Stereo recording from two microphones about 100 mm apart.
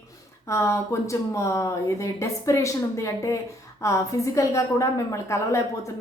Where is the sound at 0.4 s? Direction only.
30° left (ahead or behind).